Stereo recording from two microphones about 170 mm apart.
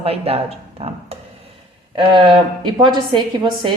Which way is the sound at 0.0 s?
35° right (ahead or behind).